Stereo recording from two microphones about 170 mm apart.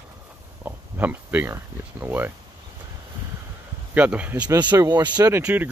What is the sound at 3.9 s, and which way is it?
Speech, 10° right (ahead or behind).